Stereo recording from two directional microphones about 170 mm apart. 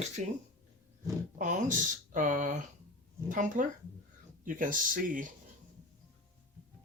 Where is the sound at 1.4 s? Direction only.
50° right (ahead or behind).